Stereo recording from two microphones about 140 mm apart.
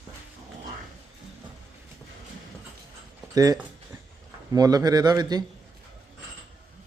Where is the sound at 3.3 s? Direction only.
25° right (ahead or behind).